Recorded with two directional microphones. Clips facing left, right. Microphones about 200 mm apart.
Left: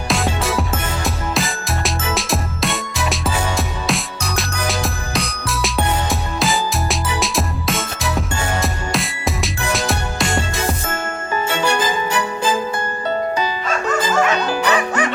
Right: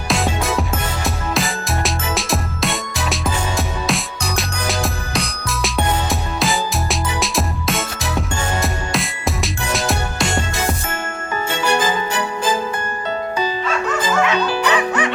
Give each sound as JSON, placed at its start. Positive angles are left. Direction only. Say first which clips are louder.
{"t": 0.1, "sound": "music", "louder": "right 1 dB", "side_deg": 0}
{"t": 13.7, "sound": "music", "louder": "even", "side_deg": 45}